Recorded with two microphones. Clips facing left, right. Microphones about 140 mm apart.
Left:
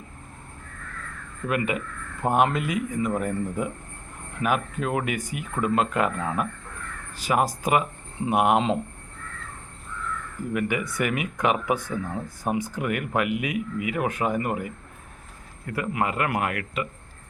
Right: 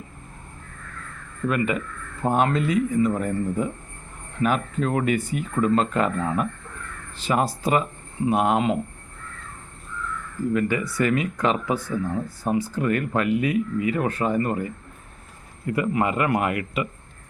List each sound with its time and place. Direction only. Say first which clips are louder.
1.5 s speech: right 2 dB; 10° left (ahead or behind)
10.5 s speech: right 2 dB; 15° left (ahead or behind)
15.6 s speech: right 4 dB; centre (ahead or behind)